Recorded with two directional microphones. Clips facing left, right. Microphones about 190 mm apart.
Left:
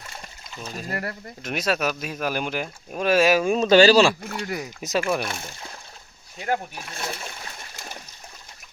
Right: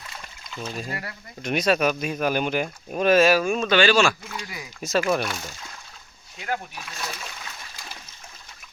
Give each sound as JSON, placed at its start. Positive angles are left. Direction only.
{"t": 0.9, "sound": "speech", "side_deg": 50}
{"t": 1.4, "sound": "speech", "side_deg": 5}
{"t": 3.5, "sound": "speech", "side_deg": 40}
{"t": 4.2, "sound": "speech", "side_deg": 50}
{"t": 4.8, "sound": "speech", "side_deg": 15}
{"t": 5.3, "sound": "speech", "side_deg": 25}
{"t": 6.4, "sound": "speech", "side_deg": 45}
{"t": 7.0, "sound": "speech", "side_deg": 25}
{"t": 7.3, "sound": "splash", "side_deg": 45}